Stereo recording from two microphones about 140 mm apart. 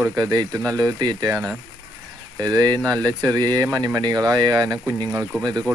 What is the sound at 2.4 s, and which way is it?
Speech, 25° right (ahead or behind).